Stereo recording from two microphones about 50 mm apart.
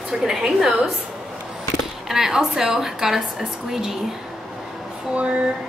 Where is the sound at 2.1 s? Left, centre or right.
Centre.